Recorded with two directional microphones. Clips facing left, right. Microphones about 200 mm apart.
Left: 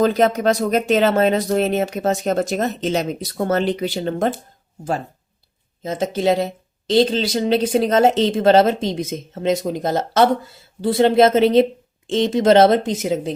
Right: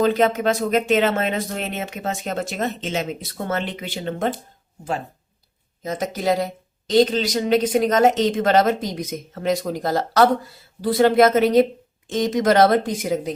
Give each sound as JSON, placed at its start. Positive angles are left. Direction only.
{"t": 0.0, "sound": "speech", "side_deg": 40}
{"t": 5.8, "sound": "speech", "side_deg": 25}